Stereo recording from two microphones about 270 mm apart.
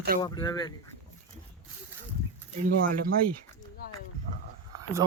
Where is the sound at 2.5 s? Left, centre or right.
Right.